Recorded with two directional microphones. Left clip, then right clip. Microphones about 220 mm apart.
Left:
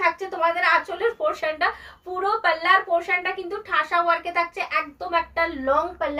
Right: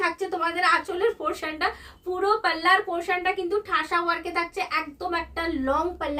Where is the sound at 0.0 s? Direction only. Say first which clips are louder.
Left 4 dB; 20° right (ahead or behind).